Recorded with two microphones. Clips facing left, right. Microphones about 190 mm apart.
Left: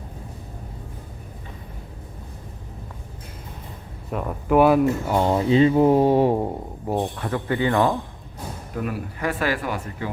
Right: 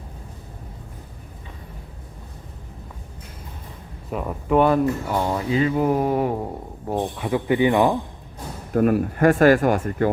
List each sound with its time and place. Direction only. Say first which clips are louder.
4.1 s speech: even; centre (ahead or behind); by 6.3 s 25° left (ahead or behind)
6.8 s speech: even; 5° left (ahead or behind)
7.2 s speech: right 4 dB; 10° right (ahead or behind)
8.7 s speech: right 11 dB; 50° right (ahead or behind)